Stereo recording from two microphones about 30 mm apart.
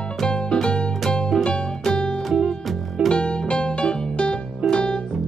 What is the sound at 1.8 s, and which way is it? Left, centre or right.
Music, left.